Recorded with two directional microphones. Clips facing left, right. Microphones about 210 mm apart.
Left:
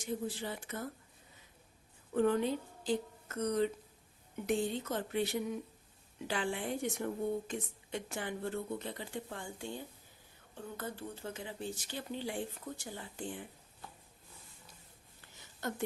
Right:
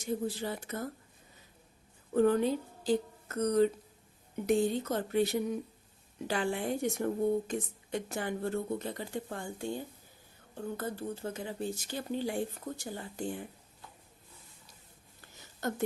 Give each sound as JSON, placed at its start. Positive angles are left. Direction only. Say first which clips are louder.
{"t": 0.3, "sound": "speech", "louder": "right 4 dB", "side_deg": -40}
{"t": 2.1, "sound": "a woman's voice", "louder": "right 4 dB", "side_deg": -40}
{"t": 10.8, "sound": "speech", "louder": "right 3 dB", "side_deg": -40}